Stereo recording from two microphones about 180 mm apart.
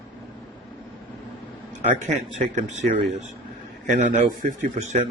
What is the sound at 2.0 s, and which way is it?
Speech, 45° right (ahead or behind).